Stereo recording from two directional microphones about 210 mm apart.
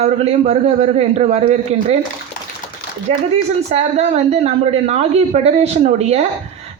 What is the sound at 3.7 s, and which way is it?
Speech, 30° right (ahead or behind).